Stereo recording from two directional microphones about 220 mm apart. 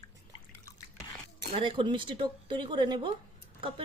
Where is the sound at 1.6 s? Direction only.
20° right (ahead or behind).